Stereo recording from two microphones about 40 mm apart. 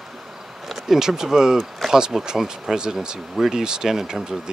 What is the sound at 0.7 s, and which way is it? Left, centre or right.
Speech, centre.